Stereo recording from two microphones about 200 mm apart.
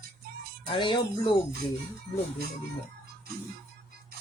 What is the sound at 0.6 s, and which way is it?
Speech, 25° left (ahead or behind).